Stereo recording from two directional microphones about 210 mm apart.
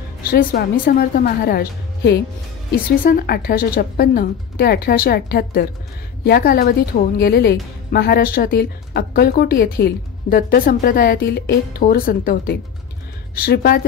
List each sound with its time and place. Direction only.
0.3 s speech: 45° left (ahead or behind)